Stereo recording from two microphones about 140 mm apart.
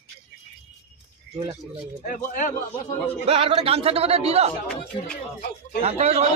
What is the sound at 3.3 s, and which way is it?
Speech, 45° right (ahead or behind).